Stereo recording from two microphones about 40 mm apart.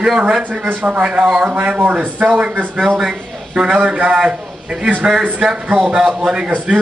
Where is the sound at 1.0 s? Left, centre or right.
Right.